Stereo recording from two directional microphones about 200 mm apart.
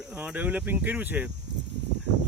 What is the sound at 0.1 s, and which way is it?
Speech, 5° right (ahead or behind).